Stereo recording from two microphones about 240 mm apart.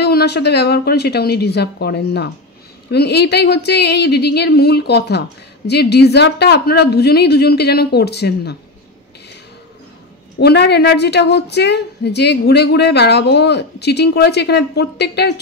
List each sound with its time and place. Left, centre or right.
0.0 s a woman's voice: left
10.4 s a woman's voice: left